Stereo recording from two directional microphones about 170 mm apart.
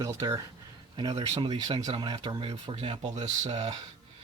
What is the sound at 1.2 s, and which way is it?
Speech, 35° right (ahead or behind).